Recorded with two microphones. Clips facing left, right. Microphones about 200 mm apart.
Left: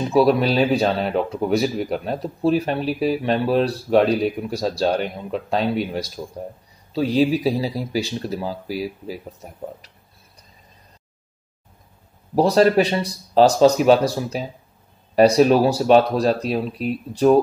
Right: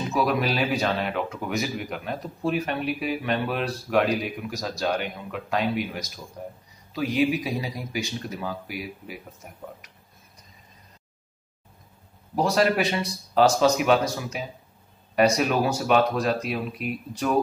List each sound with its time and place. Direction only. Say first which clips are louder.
0.1 s speech: left 8 dB; 30° left (ahead or behind)
12.4 s speech: left 7 dB; 35° left (ahead or behind)